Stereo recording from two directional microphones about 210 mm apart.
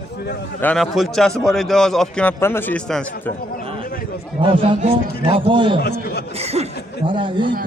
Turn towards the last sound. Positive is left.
turn(degrees=-25)  # may be behind; listen again after turning